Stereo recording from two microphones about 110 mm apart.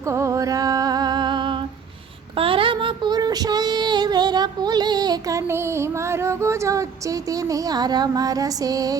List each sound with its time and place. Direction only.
0.1 s music: 25° right (ahead or behind); by 1.5 s 45° right (ahead or behind)
2.3 s child singing: 55° right (ahead or behind); by 5.4 s 40° right (ahead or behind)
5.5 s female singing: 25° right (ahead or behind)